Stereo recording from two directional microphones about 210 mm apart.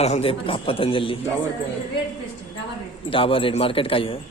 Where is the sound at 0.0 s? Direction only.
30° left (ahead or behind).